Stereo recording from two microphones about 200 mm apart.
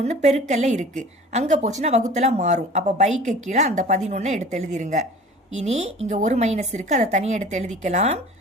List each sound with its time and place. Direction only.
0.0 s speech: 35° right (ahead or behind)